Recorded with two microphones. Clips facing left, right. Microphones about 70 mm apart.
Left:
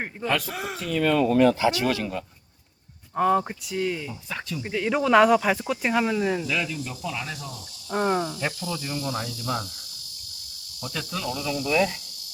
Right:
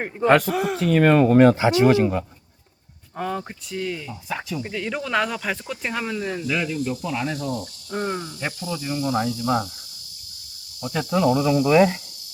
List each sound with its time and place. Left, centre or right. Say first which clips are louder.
0.3 s speech: right 10 dB; right
0.5 s speech: right 9 dB; centre
0.8 s speech: right 5 dB; right
1.7 s speech: right 9 dB; right
3.2 s speech: left 7 dB; centre
4.3 s speech: right 6 dB; centre
4.6 s speech: left 4 dB; centre
6.5 s speech: right 4 dB; centre
7.9 s speech: left 4 dB; centre
8.4 s speech: right 1 dB; centre
10.8 s speech: right 10 dB; right